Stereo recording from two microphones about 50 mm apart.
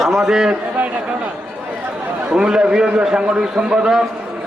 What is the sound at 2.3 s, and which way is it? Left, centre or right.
A man's voice, centre.